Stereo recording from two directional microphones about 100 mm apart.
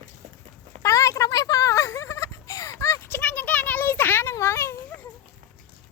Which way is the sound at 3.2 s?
15° left (ahead or behind).